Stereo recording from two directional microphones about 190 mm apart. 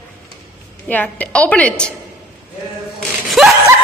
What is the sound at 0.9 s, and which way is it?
Speech, 10° left (ahead or behind).